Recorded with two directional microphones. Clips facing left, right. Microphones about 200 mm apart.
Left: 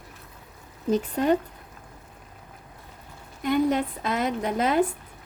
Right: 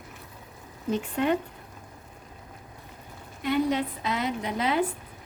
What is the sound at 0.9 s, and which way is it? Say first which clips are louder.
Speech: left 3 dB; 40° left (ahead or behind).